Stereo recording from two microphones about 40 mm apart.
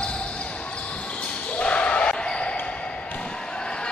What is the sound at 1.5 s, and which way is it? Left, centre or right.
Basketball bounce, left.